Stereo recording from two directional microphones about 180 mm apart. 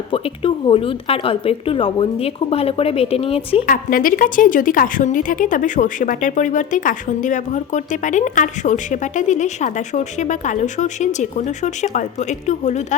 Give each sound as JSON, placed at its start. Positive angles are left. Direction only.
{"t": 0.1, "sound": "a woman's voice", "side_deg": 30}
{"t": 3.7, "sound": "a woman's voice", "side_deg": 50}